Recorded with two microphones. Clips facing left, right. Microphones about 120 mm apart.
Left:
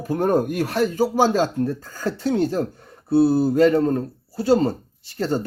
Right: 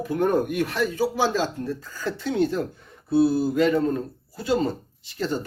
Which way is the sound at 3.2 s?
35° left (ahead or behind).